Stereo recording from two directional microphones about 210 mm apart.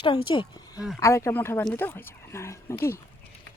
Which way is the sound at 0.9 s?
15° left (ahead or behind).